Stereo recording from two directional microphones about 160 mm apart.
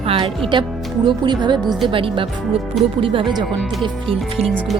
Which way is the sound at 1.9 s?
35° right (ahead or behind).